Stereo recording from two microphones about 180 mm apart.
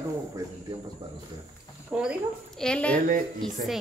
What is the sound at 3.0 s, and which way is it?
Speech, 50° right (ahead or behind).